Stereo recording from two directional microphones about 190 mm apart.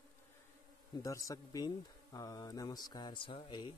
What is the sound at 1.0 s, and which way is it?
Speech, 15° left (ahead or behind).